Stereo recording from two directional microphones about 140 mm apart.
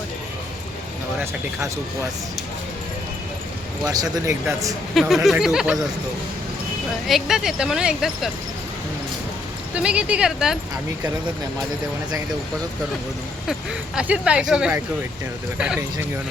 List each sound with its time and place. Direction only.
3.8 s speech: 25° right (ahead or behind)
4.9 s speech: centre (ahead or behind)
7.1 s speech: 5° right (ahead or behind)
9.7 s speech: 10° right (ahead or behind)
13.5 s speech: 10° right (ahead or behind)